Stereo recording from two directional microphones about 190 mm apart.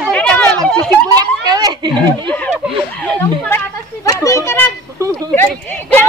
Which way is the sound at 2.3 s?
5° left (ahead or behind).